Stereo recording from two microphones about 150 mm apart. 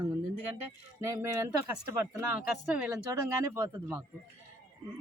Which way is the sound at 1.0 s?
20° right (ahead or behind).